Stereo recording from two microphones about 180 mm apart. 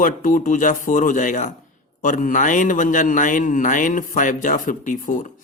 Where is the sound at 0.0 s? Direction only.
45° left (ahead or behind).